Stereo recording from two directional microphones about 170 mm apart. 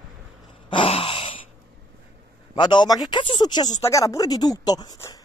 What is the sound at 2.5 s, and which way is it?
A woman's voice, 25° left (ahead or behind).